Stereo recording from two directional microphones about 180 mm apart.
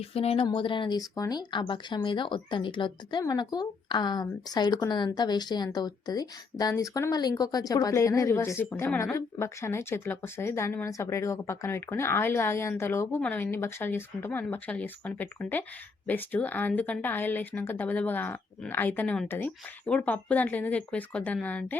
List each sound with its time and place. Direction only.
0.1 s a woman's voice: 35° left (ahead or behind); by 21.8 s 10° left (ahead or behind)